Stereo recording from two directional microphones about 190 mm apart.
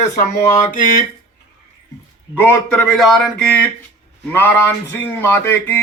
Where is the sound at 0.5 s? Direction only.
45° left (ahead or behind).